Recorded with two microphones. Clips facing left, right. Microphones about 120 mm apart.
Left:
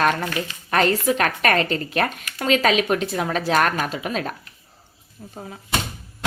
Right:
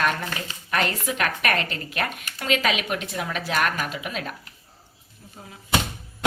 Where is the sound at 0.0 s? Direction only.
40° left (ahead or behind).